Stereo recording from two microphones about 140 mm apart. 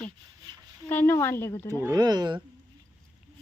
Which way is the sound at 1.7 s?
20° right (ahead or behind).